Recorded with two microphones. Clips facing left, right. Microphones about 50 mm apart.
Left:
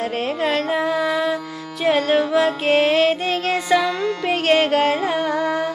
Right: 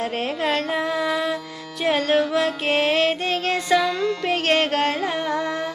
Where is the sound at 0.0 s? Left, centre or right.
Centre.